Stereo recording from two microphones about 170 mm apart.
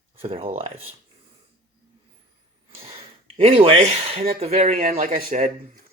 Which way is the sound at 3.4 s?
35° right (ahead or behind).